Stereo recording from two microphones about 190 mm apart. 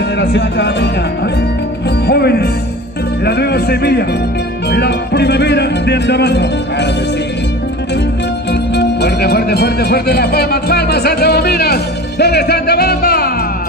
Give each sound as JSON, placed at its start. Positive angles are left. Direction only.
{"t": 0.2, "sound": "speech", "side_deg": 65}
{"t": 2.0, "sound": "music", "side_deg": 55}
{"t": 3.3, "sound": "speech", "side_deg": 60}
{"t": 8.5, "sound": "speech", "side_deg": 60}